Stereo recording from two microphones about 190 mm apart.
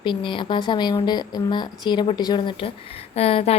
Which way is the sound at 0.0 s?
25° left (ahead or behind).